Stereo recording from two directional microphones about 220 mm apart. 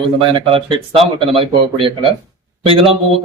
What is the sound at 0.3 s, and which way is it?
A man's voice, 25° right (ahead or behind).